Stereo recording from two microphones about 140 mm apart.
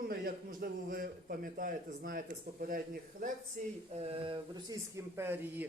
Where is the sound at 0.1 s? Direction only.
90° right.